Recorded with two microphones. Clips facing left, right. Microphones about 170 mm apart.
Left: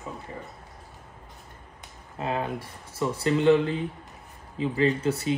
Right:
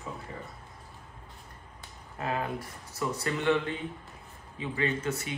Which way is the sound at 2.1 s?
25° left (ahead or behind).